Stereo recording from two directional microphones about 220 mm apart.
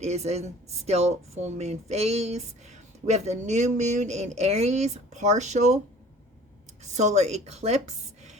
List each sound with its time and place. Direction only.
0.0 s speech: 30° right (ahead or behind)
6.8 s speech: 30° right (ahead or behind)